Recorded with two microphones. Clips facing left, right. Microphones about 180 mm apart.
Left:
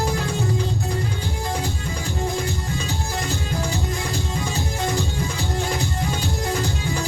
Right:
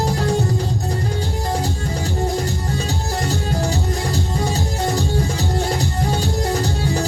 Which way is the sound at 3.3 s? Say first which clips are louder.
Right 5 dB; 40° right (ahead or behind).